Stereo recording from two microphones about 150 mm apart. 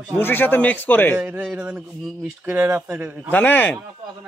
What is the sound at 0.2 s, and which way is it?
Speech, 15° left (ahead or behind).